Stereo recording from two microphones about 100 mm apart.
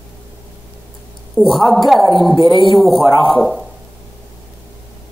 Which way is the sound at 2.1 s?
50° left (ahead or behind).